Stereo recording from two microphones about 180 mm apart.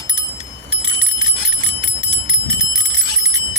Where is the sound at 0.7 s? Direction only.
30° right (ahead or behind).